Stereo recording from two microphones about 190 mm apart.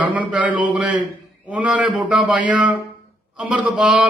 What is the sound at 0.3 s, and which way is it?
A man's voice, 5° right (ahead or behind).